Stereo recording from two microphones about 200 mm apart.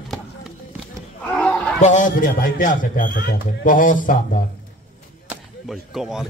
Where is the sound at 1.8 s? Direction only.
40° left (ahead or behind).